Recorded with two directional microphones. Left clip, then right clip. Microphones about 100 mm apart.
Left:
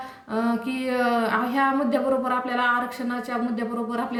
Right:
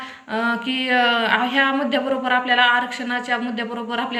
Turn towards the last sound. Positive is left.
turn(degrees=35)  # may be behind; listen again after turning